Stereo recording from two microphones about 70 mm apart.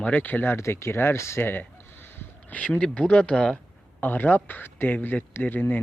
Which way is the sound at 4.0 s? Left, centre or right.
Left.